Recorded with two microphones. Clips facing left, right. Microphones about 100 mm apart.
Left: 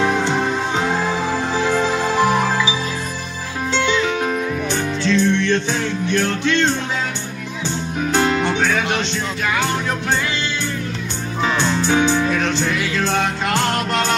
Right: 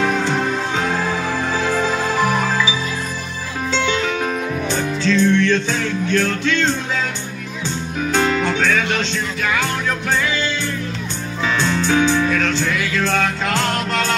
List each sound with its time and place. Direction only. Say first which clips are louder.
0.0 s music: left 1 dB; 15° left (ahead or behind)
4.2 s music: left 1 dB; 20° left (ahead or behind)
8.2 s music: even; 15° left (ahead or behind)
11.4 s music: even; 20° left (ahead or behind)